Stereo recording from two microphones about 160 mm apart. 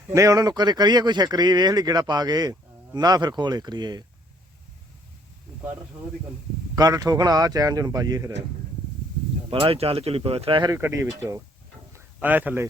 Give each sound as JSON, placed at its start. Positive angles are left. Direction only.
{"t": 0.1, "sound": "speech", "side_deg": -20}
{"t": 6.7, "sound": "speech", "side_deg": -20}
{"t": 9.5, "sound": "speech", "side_deg": -35}
{"t": 10.7, "sound": "speech", "side_deg": -15}
{"t": 11.9, "sound": "a sound", "side_deg": -10}